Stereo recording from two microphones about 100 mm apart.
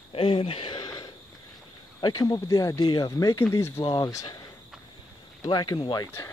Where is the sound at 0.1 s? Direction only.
70° left (ahead or behind).